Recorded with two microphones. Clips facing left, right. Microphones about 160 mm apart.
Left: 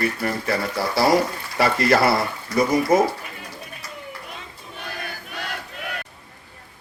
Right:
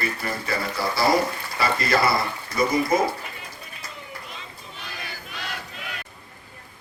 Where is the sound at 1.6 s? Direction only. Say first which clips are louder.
Left 5 dB; 70° left (ahead or behind).